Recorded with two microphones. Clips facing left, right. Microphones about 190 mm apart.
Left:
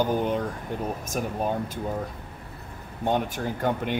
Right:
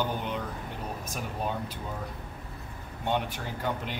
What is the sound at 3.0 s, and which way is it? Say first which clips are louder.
Speech: left 5 dB; 45° left (ahead or behind).